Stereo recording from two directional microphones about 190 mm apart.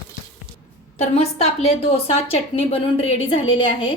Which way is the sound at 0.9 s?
35° left (ahead or behind).